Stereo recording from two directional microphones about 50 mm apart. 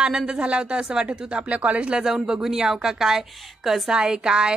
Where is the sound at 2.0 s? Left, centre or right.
Centre.